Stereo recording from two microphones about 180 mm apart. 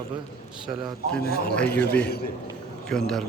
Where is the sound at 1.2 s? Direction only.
60° left (ahead or behind).